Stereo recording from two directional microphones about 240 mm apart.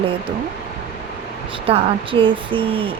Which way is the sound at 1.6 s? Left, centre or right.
Right.